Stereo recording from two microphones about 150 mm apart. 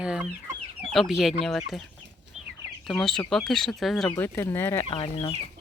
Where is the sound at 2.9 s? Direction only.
5° left (ahead or behind).